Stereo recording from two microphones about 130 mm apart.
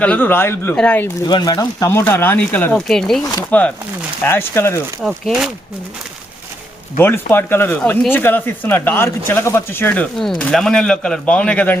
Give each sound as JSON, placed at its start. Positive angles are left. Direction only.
{"t": 0.0, "sound": "speech", "side_deg": 10}
{"t": 1.2, "sound": "speech", "side_deg": 30}
{"t": 5.0, "sound": "speech", "side_deg": -5}
{"t": 7.0, "sound": "speech", "side_deg": 15}